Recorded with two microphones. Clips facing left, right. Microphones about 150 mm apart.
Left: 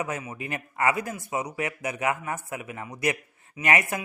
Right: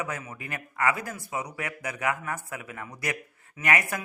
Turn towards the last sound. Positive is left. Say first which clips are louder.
# left 2 dB
turn(degrees=25)  # may be behind; listen again after turning